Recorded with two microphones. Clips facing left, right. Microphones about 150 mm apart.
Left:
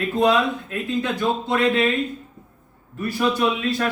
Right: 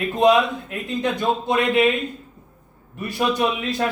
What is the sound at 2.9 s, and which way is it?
Speech, 15° right (ahead or behind).